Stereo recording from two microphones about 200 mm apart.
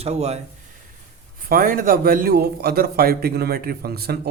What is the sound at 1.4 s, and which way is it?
A man's voice, 45° right (ahead or behind).